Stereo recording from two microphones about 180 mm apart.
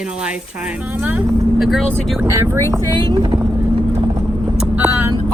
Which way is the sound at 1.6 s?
Centre (ahead or behind).